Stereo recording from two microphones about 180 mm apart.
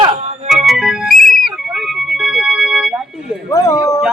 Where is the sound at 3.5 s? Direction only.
20° left (ahead or behind).